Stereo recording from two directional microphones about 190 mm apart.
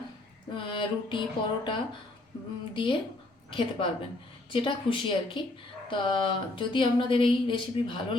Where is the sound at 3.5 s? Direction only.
25° left (ahead or behind).